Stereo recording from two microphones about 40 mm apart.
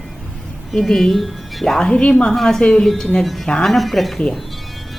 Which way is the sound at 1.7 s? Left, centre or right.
Centre.